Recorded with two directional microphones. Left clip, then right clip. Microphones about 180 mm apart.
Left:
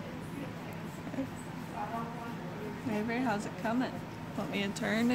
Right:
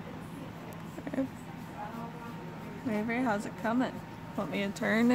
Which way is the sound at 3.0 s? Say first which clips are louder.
Right 2 dB; 30° right (ahead or behind).